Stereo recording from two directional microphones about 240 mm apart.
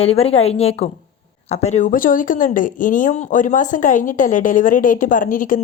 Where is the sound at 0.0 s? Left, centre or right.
Left.